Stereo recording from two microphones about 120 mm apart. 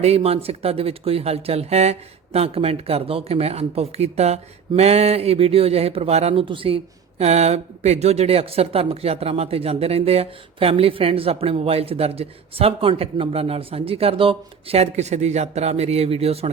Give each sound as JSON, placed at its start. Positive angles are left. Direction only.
{"t": 0.0, "sound": "speech", "side_deg": -60}